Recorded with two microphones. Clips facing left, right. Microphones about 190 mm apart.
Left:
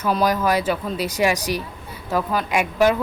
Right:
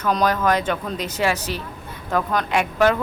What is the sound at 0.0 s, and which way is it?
Speech, 10° left (ahead or behind).